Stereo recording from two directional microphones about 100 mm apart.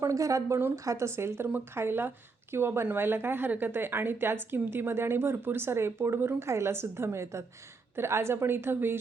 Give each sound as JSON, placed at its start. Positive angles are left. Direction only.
{"t": 0.0, "sound": "a woman's voice", "side_deg": -35}